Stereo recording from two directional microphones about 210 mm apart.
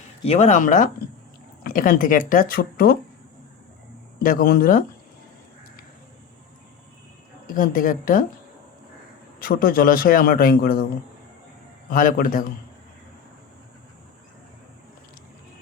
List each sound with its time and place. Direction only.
0.3 s speech: 35° left (ahead or behind)
4.2 s a man's voice: 45° left (ahead or behind)
7.4 s speech: 40° left (ahead or behind)
9.4 s a man's voice: 40° left (ahead or behind)
11.9 s speech: 40° left (ahead or behind)